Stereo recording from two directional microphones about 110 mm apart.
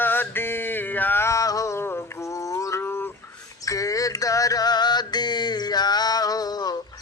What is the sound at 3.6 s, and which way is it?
Mantra, 30° left (ahead or behind).